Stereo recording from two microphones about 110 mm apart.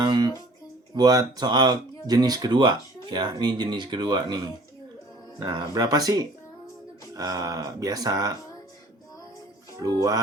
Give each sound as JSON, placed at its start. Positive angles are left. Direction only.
{"t": 0.0, "sound": "speech", "side_deg": -40}
{"t": 5.7, "sound": "speech", "side_deg": -35}
{"t": 9.8, "sound": "speech", "side_deg": -35}